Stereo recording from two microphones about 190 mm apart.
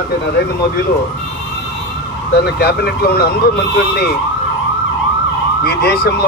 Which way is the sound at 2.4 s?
55° left (ahead or behind).